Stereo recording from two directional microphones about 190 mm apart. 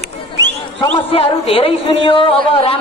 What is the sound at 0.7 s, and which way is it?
A man's voice, 30° left (ahead or behind).